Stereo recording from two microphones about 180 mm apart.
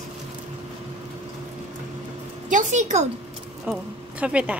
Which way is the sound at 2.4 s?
45° right (ahead or behind).